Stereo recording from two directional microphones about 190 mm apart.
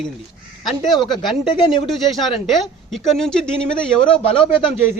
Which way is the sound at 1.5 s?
25° left (ahead or behind).